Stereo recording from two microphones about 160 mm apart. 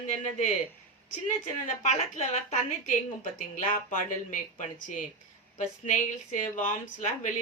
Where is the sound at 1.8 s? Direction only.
50° left (ahead or behind).